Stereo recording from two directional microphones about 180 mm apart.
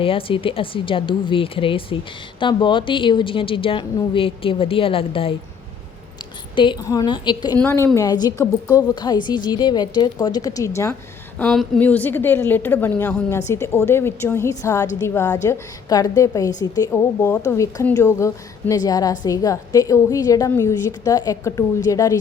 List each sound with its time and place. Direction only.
0.0 s a woman's voice: 30° left (ahead or behind)
6.6 s a woman's voice: 25° left (ahead or behind)
11.3 s a woman's voice: centre (ahead or behind); by 22.2 s 20° left (ahead or behind)